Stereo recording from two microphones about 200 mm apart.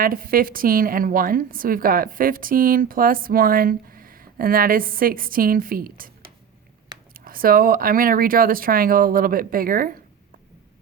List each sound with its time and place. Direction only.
0.0 s a woman's voice: 45° right (ahead or behind)
7.1 s a woman's voice: 45° right (ahead or behind)